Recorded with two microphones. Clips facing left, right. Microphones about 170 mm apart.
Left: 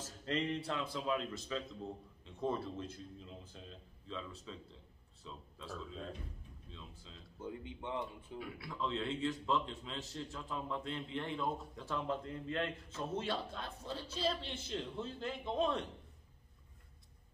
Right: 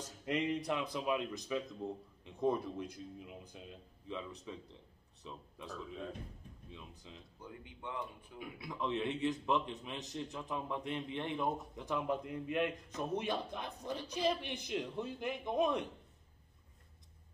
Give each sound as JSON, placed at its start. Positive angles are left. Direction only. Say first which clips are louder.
{"t": 0.2, "sound": "a man's voice", "louder": "right 2 dB", "side_deg": -15}
{"t": 6.7, "sound": "a man's voice", "louder": "right 2 dB", "side_deg": -15}
{"t": 7.3, "sound": "speech", "louder": "left 10 dB", "side_deg": 20}
{"t": 8.4, "sound": "a man's voice", "louder": "right 1 dB", "side_deg": -20}